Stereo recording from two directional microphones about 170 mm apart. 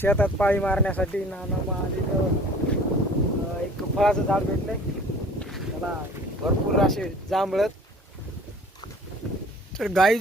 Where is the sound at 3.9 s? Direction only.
Centre (ahead or behind).